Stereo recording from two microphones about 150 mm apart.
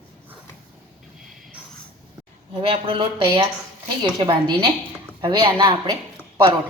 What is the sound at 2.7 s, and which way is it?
Speech, 35° right (ahead or behind).